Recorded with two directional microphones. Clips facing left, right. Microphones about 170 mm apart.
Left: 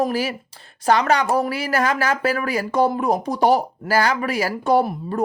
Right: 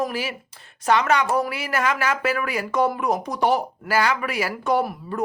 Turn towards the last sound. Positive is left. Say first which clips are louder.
# left 4 dB
turn(degrees=35)  # may be behind; listen again after turning